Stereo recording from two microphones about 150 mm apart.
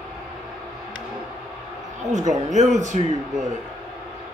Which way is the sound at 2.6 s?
55° right (ahead or behind).